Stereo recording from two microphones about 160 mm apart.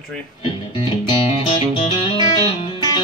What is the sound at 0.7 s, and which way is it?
Music, 30° left (ahead or behind).